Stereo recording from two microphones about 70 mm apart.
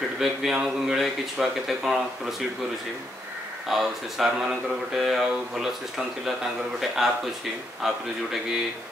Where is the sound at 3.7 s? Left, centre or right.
Centre.